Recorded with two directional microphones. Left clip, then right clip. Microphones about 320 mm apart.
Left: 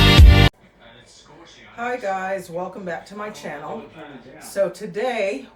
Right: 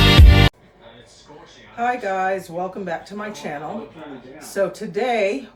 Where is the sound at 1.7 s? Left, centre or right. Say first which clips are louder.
Right 3 dB; centre.